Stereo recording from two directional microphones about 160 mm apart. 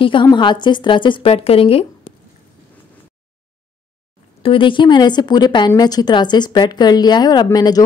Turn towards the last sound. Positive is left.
turn(degrees=25)  # may be behind; listen again after turning